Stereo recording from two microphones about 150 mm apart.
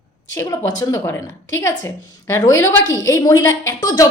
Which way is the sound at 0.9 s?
20° left (ahead or behind).